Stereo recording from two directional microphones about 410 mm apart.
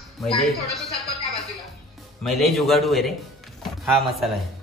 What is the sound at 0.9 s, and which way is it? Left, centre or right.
Music, centre.